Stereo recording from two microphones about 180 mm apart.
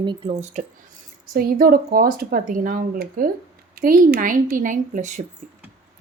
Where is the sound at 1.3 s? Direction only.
55° right (ahead or behind).